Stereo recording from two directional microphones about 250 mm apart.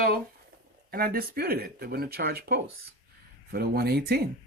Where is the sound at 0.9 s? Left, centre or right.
Right.